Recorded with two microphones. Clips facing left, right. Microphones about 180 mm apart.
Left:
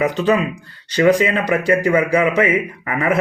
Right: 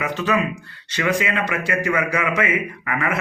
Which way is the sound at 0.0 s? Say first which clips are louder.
Left 5 dB; 35° left (ahead or behind).